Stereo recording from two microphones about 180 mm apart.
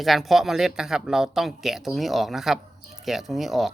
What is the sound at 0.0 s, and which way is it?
A woman's voice, centre (ahead or behind).